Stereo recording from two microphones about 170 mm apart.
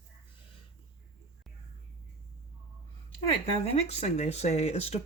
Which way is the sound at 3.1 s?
35° left (ahead or behind).